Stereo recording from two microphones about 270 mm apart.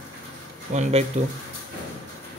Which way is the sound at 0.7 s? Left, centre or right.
Right.